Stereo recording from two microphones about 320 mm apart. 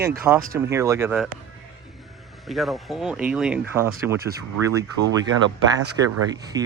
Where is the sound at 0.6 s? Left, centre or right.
Centre.